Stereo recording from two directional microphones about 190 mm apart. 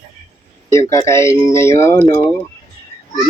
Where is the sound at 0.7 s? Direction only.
15° left (ahead or behind).